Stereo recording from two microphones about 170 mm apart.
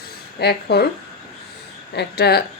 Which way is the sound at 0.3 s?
75° left (ahead or behind).